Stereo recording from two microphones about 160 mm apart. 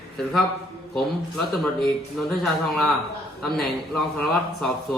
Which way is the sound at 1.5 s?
5° left (ahead or behind).